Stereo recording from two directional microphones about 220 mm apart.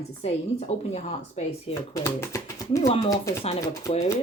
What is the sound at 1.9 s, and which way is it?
Speech, 15° left (ahead or behind).